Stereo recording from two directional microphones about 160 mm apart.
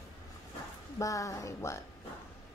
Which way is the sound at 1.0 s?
20° left (ahead or behind).